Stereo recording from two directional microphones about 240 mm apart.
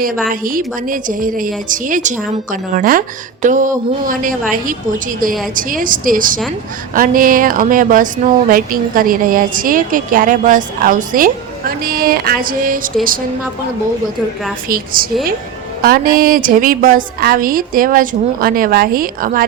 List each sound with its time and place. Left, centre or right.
0.3 s speech: right
5.5 s speech: right
15.0 s speech: right